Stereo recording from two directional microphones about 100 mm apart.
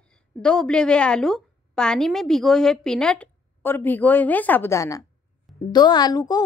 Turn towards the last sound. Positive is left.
turn(degrees=40)  # may be behind; listen again after turning